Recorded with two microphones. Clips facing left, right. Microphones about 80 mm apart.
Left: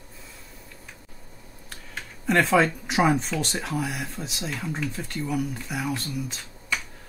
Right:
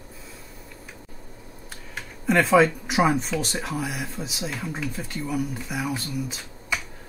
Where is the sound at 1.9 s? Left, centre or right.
Centre.